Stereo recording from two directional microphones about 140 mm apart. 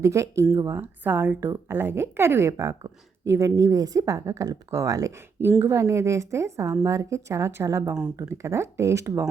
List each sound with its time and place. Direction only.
0.0 s a woman's voice: 20° right (ahead or behind)